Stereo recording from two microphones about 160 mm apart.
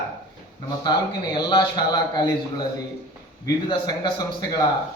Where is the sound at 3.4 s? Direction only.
25° left (ahead or behind).